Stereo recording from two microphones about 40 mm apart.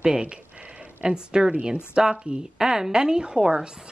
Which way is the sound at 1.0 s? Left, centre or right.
Right.